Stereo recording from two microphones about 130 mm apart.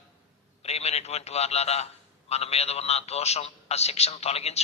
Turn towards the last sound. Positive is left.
turn(degrees=55)  # may be behind; listen again after turning